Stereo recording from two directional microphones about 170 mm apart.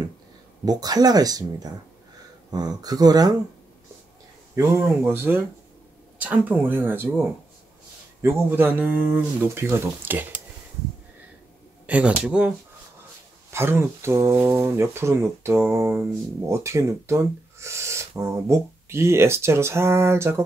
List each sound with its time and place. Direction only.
0.7 s speech: 20° right (ahead or behind)
4.6 s speech: 15° right (ahead or behind)
11.8 s speech: 5° right (ahead or behind)